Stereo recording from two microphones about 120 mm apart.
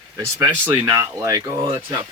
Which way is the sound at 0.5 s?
15° right (ahead or behind).